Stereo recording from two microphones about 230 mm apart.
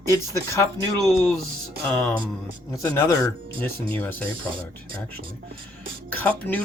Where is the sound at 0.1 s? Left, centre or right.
Centre.